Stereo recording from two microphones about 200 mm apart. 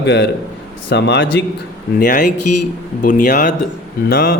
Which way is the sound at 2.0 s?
40° left (ahead or behind).